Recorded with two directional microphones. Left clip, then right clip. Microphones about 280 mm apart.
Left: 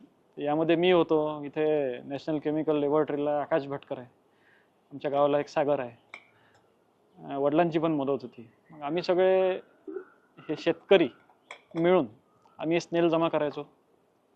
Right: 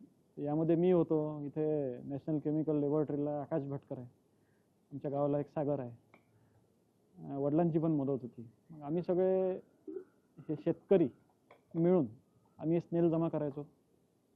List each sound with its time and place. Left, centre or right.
0.3 s speech: centre
1.1 s speech: left
1.4 s a man's voice: centre